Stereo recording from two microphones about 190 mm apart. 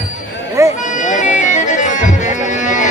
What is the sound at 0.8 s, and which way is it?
Bagpipes, 40° left (ahead or behind).